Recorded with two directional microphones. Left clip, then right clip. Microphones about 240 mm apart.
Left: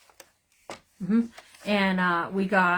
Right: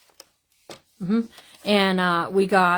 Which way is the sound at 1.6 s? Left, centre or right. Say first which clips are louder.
Right 4 dB; right.